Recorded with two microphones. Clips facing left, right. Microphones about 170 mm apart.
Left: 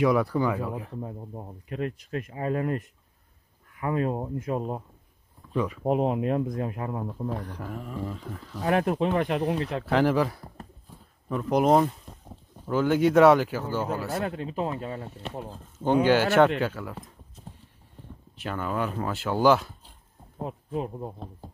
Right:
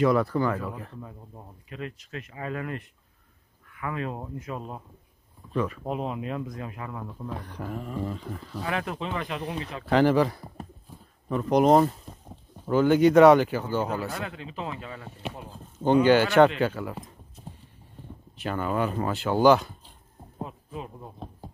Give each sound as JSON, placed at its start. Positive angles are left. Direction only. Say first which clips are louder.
{"t": 0.0, "sound": "speech", "louder": "even", "side_deg": 10}
{"t": 0.9, "sound": "speech", "louder": "left 6 dB", "side_deg": 35}
{"t": 1.7, "sound": "speech", "louder": "left 6 dB", "side_deg": 50}
{"t": 2.3, "sound": "speech", "louder": "left 5 dB", "side_deg": 40}
{"t": 5.5, "sound": "speech", "louder": "even", "side_deg": 15}
{"t": 5.9, "sound": "speech", "louder": "left 7 dB", "side_deg": 60}
{"t": 7.4, "sound": "a man's voice", "louder": "right 1 dB", "side_deg": 0}
{"t": 8.6, "sound": "speech", "louder": "left 8 dB", "side_deg": 45}
{"t": 9.4, "sound": "a man's voice", "louder": "left 6 dB", "side_deg": 0}
{"t": 14.2, "sound": "speech", "louder": "left 5 dB", "side_deg": 45}
{"t": 15.8, "sound": "a man's voice", "louder": "right 2 dB", "side_deg": 0}
{"t": 18.4, "sound": "a man's voice", "louder": "right 2 dB", "side_deg": 0}
{"t": 20.4, "sound": "speech", "louder": "left 7 dB", "side_deg": 50}